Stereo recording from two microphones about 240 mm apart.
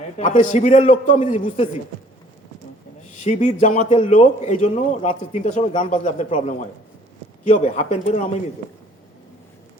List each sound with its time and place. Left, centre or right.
0.2 s a man's voice: left
3.2 s a man's voice: left